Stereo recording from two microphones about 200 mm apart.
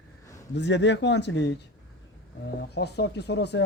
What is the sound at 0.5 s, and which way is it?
Speech, 60° left (ahead or behind).